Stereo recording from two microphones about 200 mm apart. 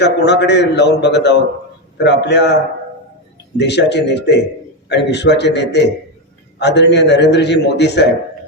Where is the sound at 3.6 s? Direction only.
60° left (ahead or behind).